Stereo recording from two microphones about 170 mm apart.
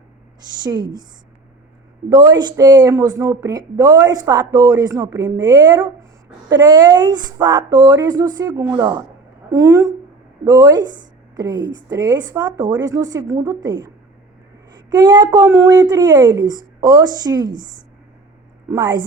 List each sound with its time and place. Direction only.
0.6 s speech: 25° right (ahead or behind)
2.0 s a woman's voice: 25° right (ahead or behind)
18.7 s speech: 25° right (ahead or behind)